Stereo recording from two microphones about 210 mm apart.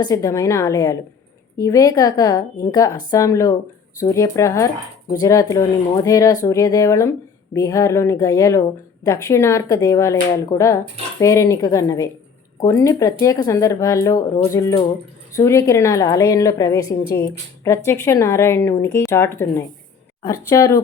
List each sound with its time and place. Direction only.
0.0 s speech: 15° left (ahead or behind)